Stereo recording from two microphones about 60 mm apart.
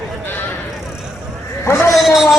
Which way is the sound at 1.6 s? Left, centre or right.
Left.